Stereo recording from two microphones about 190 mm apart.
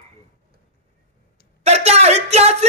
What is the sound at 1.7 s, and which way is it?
Speech, 35° right (ahead or behind).